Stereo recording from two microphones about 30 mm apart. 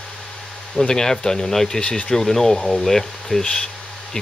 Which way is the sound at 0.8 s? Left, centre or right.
Left.